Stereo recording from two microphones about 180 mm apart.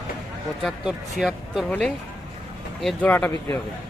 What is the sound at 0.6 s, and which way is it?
Speech, centre (ahead or behind).